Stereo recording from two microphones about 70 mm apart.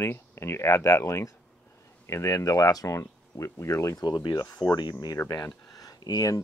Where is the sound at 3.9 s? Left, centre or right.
Left.